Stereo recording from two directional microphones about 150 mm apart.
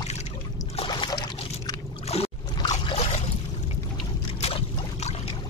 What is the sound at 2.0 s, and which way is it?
Boat, 45° left (ahead or behind).